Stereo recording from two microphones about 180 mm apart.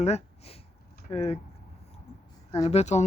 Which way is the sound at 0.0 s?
35° left (ahead or behind).